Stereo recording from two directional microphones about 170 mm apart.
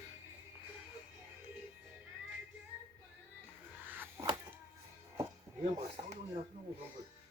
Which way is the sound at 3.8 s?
10° right (ahead or behind).